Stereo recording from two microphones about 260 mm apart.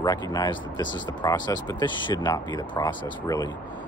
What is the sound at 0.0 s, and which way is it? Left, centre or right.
Speech, centre.